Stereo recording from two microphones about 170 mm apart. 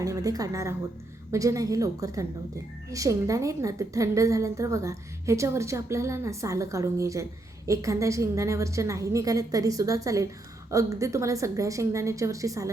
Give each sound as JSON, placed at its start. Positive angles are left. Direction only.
{"t": 0.0, "sound": "a woman's voice", "side_deg": -20}